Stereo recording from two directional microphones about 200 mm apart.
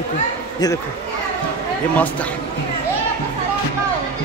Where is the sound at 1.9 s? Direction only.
5° left (ahead or behind).